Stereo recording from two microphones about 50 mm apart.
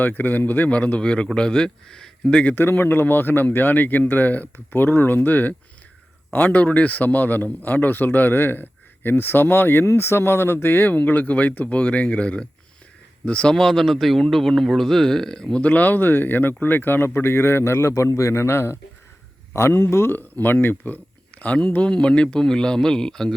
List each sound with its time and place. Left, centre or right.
0.0 s a man's voice: left
0.8 s speech: left
2.6 s a man's voice: left
13.6 s speech: centre
15.6 s a man's voice: left
17.6 s a man's voice: left
20.1 s speech: left; by 23.3 s centre